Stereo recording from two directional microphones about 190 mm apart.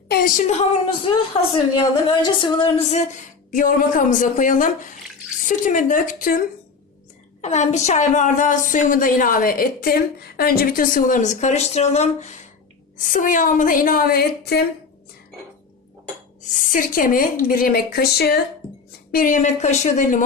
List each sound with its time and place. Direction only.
0.1 s a woman's voice: 50° left (ahead or behind)
7.4 s a woman's voice: 35° left (ahead or behind); by 14.6 s 55° left (ahead or behind)
16.4 s a woman's voice: 40° left (ahead or behind)
19.1 s speech: 45° left (ahead or behind)